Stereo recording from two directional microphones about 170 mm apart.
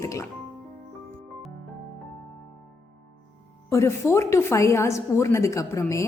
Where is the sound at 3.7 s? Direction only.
15° left (ahead or behind).